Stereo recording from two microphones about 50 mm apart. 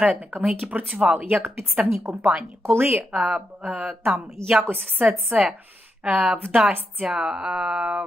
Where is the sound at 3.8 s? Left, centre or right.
Centre.